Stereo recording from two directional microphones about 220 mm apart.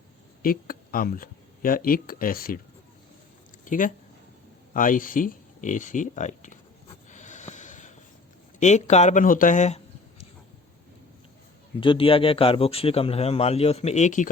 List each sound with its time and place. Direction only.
0.4 s speech: 40° left (ahead or behind)
3.6 s speech: 35° left (ahead or behind)
7.1 s snort: 35° left (ahead or behind)
8.5 s speech: 30° left (ahead or behind)
11.8 s a man's voice: 25° left (ahead or behind)